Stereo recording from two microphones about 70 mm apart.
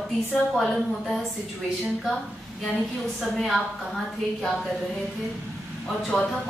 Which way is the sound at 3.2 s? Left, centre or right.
Centre.